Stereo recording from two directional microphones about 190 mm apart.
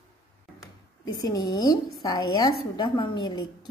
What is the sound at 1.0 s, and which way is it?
A woman's voice, 20° left (ahead or behind).